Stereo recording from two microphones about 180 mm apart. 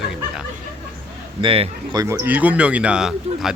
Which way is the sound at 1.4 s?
30° right (ahead or behind).